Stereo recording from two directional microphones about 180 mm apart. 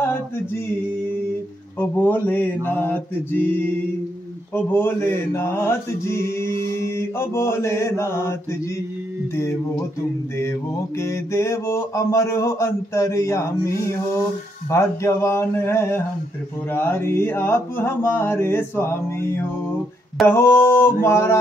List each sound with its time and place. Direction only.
1.8 s mantra: 10° left (ahead or behind)
11.0 s mantra: 15° left (ahead or behind)